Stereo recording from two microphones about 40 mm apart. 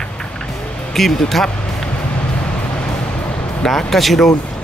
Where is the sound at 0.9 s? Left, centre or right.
Centre.